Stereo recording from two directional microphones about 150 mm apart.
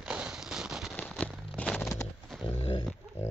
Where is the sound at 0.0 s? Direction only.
5° right (ahead or behind).